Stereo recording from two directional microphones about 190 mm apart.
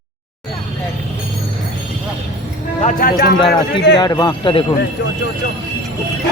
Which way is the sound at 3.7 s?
65° left (ahead or behind).